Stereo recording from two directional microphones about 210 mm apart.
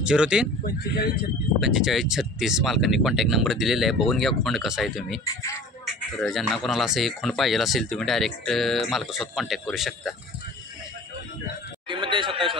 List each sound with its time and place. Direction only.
0.0 s speech: 5° right (ahead or behind)
0.7 s speech: 50° left (ahead or behind)
1.6 s speech: centre (ahead or behind)
5.2 s speech: 15° left (ahead or behind)
6.2 s speech: centre (ahead or behind)
11.9 s a sound: 25° right (ahead or behind)